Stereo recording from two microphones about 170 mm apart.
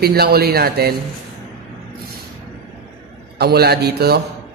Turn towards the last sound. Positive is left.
turn(degrees=-70)  # may be behind; listen again after turning